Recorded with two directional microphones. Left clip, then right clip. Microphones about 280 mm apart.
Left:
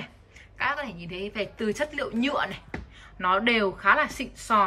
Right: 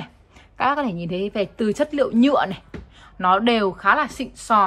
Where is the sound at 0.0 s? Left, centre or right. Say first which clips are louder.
Right 3 dB; centre.